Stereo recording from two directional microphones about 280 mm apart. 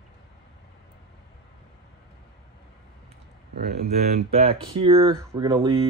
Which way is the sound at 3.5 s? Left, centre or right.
Right.